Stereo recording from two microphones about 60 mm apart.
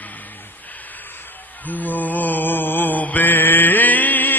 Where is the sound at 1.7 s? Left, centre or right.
Left.